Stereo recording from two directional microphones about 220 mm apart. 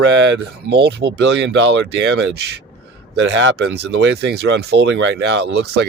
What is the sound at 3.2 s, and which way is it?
Speech, 55° right (ahead or behind).